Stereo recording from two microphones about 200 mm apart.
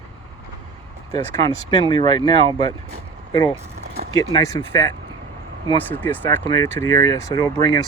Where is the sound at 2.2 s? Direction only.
30° right (ahead or behind).